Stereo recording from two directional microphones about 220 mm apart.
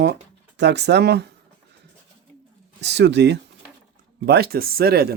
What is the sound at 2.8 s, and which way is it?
Speech, 50° right (ahead or behind).